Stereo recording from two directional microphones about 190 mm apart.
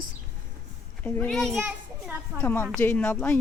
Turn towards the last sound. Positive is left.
turn(degrees=5)  # may be behind; listen again after turning